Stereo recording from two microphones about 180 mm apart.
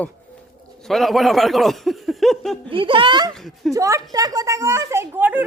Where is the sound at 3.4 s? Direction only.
Centre (ahead or behind).